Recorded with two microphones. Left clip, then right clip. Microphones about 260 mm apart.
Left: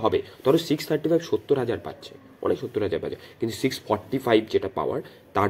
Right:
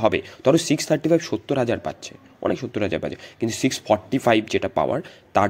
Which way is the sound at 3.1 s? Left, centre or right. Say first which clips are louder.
Right 3 dB; right.